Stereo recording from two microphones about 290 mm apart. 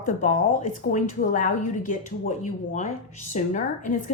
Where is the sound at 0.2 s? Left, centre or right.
Left.